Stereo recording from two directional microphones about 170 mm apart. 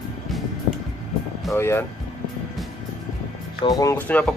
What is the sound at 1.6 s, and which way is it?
Speech, 15° left (ahead or behind).